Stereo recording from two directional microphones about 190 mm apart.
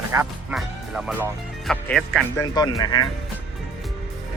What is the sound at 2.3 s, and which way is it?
Speech, 20° left (ahead or behind).